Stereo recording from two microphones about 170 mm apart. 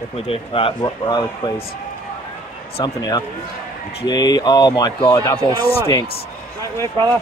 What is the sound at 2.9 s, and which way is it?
Speech, 25° left (ahead or behind).